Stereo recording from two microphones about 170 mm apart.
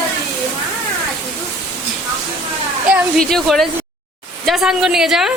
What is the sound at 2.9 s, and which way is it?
A woman's voice, 5° right (ahead or behind).